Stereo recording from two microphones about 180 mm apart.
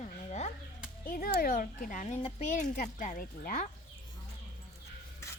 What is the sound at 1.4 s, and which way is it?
Speech, 50° left (ahead or behind).